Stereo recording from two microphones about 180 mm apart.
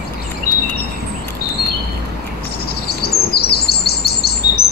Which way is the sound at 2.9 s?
60° left (ahead or behind).